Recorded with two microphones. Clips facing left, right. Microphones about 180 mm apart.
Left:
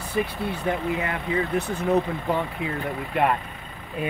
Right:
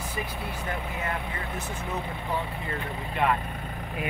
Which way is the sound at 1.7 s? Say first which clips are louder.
Left 11 dB; 65° left (ahead or behind).